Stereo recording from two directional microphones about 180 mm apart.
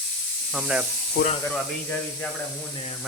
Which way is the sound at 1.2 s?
65° left (ahead or behind).